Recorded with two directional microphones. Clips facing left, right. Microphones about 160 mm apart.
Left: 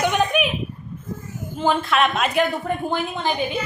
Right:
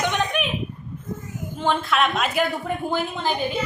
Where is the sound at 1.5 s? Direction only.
Centre (ahead or behind).